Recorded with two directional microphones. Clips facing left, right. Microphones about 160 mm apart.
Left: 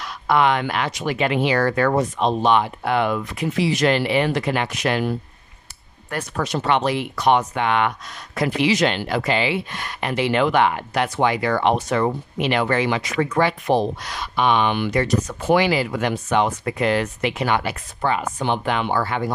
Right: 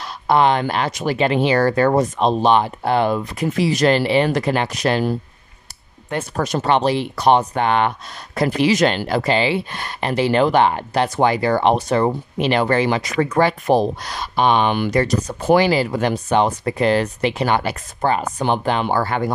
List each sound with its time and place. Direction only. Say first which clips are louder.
0.0 s speech: right 3 dB; 30° right (ahead or behind)
6.3 s speech: right 2 dB; 45° right (ahead or behind)